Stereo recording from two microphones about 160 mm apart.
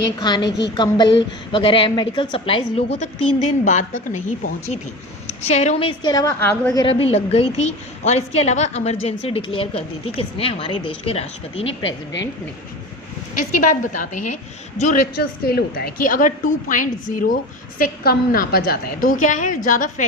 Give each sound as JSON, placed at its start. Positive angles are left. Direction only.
{"t": 0.2, "sound": "a woman's voice", "side_deg": 25}
{"t": 3.0, "sound": "a woman's voice", "side_deg": 50}
{"t": 5.5, "sound": "a woman's voice", "side_deg": 40}
{"t": 6.0, "sound": "a woman's voice", "side_deg": 30}
{"t": 6.2, "sound": "a woman's voice", "side_deg": 10}
{"t": 6.7, "sound": "a woman's voice", "side_deg": 35}
{"t": 13.6, "sound": "a woman's voice", "side_deg": 55}
{"t": 15.1, "sound": "a woman's voice", "side_deg": 75}